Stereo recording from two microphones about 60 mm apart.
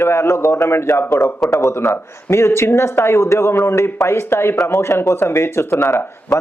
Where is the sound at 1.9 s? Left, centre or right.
Left.